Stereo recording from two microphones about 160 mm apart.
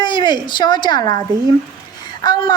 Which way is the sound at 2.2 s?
25° left (ahead or behind).